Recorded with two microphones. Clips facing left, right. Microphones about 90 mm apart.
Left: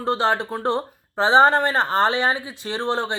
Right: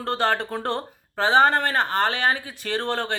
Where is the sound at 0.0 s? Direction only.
20° left (ahead or behind).